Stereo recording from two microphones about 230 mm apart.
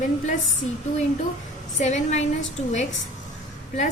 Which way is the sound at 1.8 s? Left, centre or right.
Left.